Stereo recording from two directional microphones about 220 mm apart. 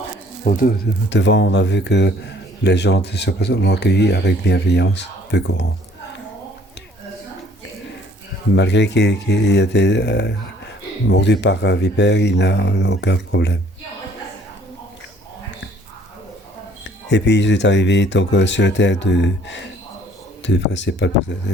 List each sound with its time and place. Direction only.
0.4 s speech: 35° left (ahead or behind)
1.1 s a man's voice: 55° left (ahead or behind)
8.5 s a man's voice: 55° left (ahead or behind)
16.8 s speech: 55° left (ahead or behind)